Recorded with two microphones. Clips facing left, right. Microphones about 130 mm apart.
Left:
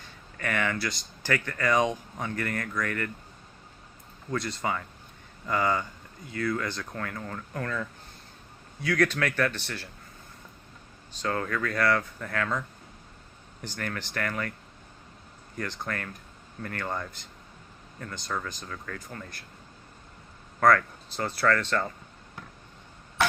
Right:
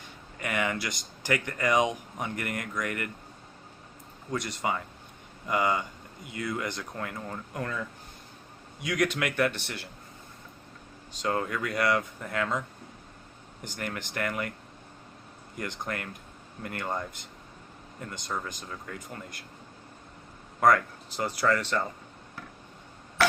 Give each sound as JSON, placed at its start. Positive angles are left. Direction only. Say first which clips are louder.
{"t": 0.0, "sound": "speech", "louder": "left 2 dB", "side_deg": -15}
{"t": 4.3, "sound": "speech", "louder": "even", "side_deg": -20}
{"t": 8.8, "sound": "speech", "louder": "left 2 dB", "side_deg": -20}
{"t": 11.1, "sound": "speech", "louder": "even", "side_deg": -15}
{"t": 13.7, "sound": "speech", "louder": "left 1 dB", "side_deg": -15}
{"t": 15.5, "sound": "speech", "louder": "left 1 dB", "side_deg": -15}
{"t": 20.6, "sound": "speech", "louder": "left 1 dB", "side_deg": -15}